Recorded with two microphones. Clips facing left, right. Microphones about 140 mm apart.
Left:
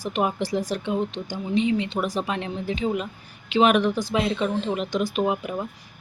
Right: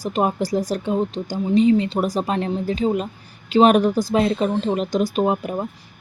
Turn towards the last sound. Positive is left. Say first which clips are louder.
# right 4 dB
turn(degrees=-35)  # may be behind; listen again after turning